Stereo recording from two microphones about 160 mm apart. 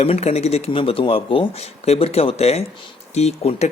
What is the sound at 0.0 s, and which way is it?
Speech, 40° left (ahead or behind).